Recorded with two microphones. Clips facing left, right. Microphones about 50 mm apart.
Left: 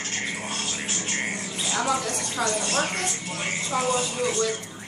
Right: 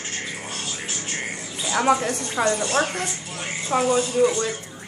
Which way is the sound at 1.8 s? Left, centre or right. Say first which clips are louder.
Right 6 dB; right.